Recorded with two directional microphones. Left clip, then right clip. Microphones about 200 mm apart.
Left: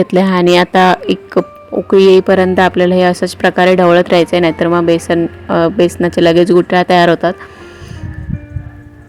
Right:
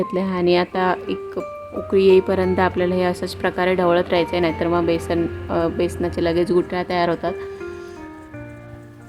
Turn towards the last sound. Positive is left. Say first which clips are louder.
# left 11 dB
turn(degrees=35)  # may be behind; listen again after turning